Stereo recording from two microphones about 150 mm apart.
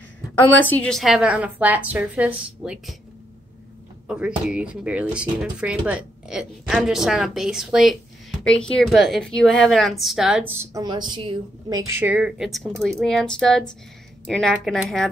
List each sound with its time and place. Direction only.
0.4 s speech: 10° left (ahead or behind); by 3.0 s 5° right (ahead or behind)
4.1 s speech: 5° right (ahead or behind)
10.6 s a woman's voice: 25° right (ahead or behind)
11.8 s speech: 15° right (ahead or behind); by 15.0 s centre (ahead or behind)